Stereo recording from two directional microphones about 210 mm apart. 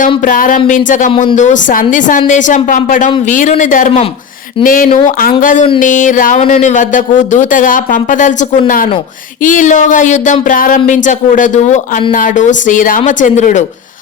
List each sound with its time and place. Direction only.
0.3 s speech: 40° left (ahead or behind)
4.9 s speech: 30° left (ahead or behind)